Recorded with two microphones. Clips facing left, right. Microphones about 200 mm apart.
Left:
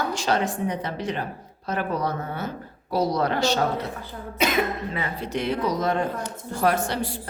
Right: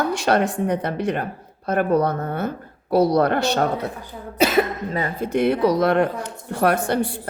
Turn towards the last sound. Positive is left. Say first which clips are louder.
# right 4 dB
turn(degrees=-55)  # may be behind; listen again after turning